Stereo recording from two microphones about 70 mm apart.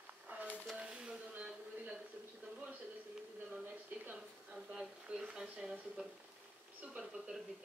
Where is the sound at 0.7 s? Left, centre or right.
Centre.